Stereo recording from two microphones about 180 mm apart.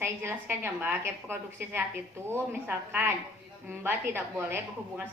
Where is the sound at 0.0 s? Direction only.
15° right (ahead or behind).